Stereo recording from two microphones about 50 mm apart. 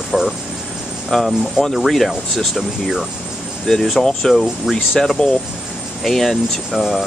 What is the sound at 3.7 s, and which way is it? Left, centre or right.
Speech, centre.